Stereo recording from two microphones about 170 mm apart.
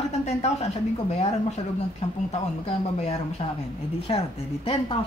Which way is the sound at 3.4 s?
40° left (ahead or behind).